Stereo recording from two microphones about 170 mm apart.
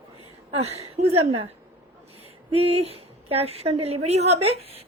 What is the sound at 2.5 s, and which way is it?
A woman's voice, 35° right (ahead or behind).